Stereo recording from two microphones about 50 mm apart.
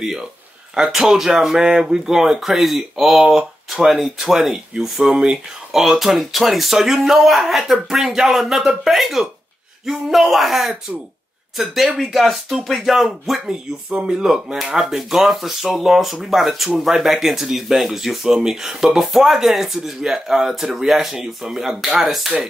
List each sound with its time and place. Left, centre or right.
0.7 s speech: centre
5.7 s speech: centre
11.7 s speech: centre